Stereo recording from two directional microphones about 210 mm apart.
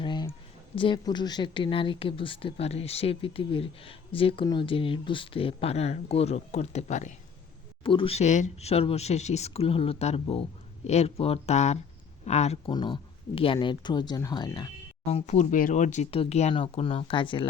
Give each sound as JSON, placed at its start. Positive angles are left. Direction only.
{"t": 0.0, "sound": "a sound", "side_deg": 20}
{"t": 0.8, "sound": "speech", "side_deg": 20}
{"t": 15.0, "sound": "speech", "side_deg": 30}